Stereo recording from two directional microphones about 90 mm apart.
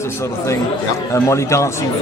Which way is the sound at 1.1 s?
30° left (ahead or behind).